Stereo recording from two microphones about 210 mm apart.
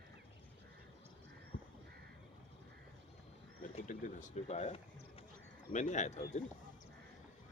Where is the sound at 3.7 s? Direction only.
35° left (ahead or behind).